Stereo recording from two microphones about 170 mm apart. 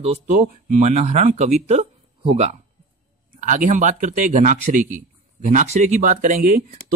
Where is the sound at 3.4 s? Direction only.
50° right (ahead or behind).